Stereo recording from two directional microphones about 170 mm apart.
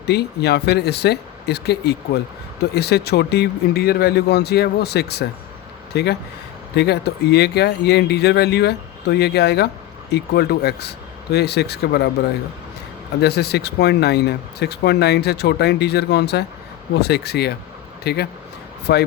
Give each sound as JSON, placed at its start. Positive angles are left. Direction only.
{"t": 0.1, "sound": "speech", "side_deg": 75}
{"t": 13.2, "sound": "speech", "side_deg": 75}